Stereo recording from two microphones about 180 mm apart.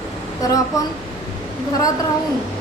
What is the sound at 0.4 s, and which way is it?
Speech, 20° left (ahead or behind).